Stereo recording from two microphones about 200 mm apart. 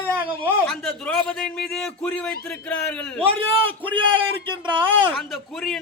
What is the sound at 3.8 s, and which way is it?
Speech, 25° right (ahead or behind).